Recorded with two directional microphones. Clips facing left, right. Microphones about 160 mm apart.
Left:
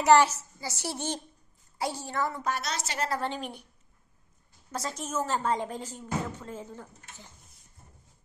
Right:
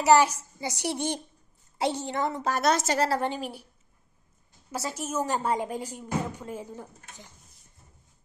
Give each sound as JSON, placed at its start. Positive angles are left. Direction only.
{"t": 0.0, "sound": "a woman's voice", "side_deg": -10}
{"t": 2.5, "sound": "a woman's voice", "side_deg": -50}
{"t": 3.2, "sound": "a woman's voice", "side_deg": -10}
{"t": 4.7, "sound": "speech", "side_deg": -10}